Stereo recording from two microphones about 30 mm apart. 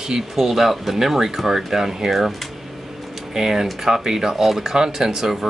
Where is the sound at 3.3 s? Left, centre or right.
Centre.